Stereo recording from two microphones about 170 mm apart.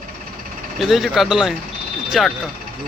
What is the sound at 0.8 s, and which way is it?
Speech, centre (ahead or behind).